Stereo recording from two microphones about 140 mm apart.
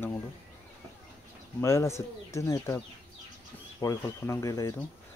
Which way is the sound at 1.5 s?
20° left (ahead or behind).